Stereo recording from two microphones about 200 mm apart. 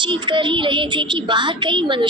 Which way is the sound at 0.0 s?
25° right (ahead or behind).